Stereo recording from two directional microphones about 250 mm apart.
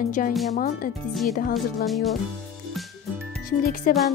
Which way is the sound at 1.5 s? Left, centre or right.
Centre.